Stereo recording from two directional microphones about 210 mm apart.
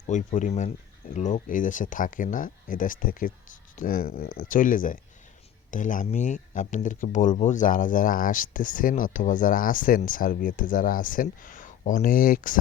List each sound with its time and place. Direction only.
0.1 s speech: 35° left (ahead or behind)